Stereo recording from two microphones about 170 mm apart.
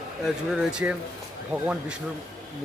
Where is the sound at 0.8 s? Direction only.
10° right (ahead or behind).